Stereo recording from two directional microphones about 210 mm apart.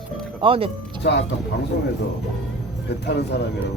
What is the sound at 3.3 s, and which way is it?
Speech, 55° left (ahead or behind).